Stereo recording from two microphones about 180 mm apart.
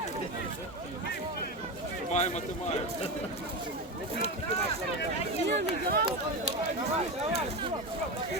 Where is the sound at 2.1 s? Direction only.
40° left (ahead or behind).